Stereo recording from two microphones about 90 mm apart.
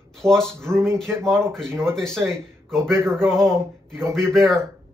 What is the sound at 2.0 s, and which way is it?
Speech, 5° left (ahead or behind).